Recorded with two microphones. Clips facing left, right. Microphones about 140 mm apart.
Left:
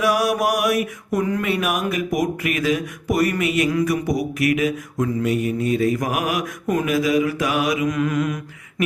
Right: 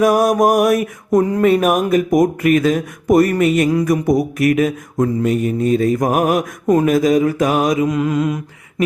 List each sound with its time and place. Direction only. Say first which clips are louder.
0.0 s mantra: right 6 dB; 45° right (ahead or behind)
7.9 s mantra: right 4 dB; 30° right (ahead or behind)